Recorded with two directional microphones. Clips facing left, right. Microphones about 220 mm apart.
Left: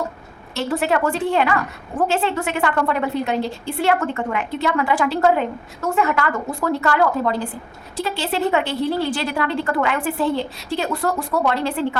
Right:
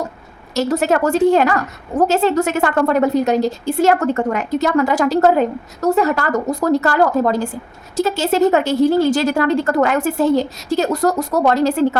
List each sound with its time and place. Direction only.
0.5 s a woman's voice: 40° right (ahead or behind)